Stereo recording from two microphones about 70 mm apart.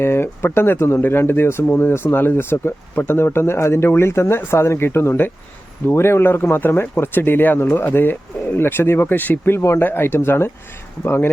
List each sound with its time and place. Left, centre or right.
0.0 s speech: left